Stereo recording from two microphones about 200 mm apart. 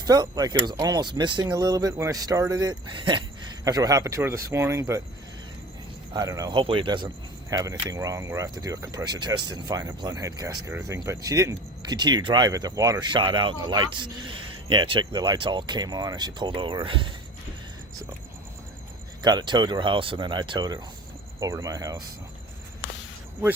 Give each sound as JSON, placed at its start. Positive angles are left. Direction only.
{"t": 0.0, "sound": "speech", "side_deg": -20}
{"t": 6.1, "sound": "speech", "side_deg": -15}
{"t": 19.2, "sound": "speech", "side_deg": -20}